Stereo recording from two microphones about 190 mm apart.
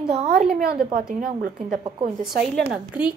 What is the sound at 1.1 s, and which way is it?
Speech, 50° right (ahead or behind).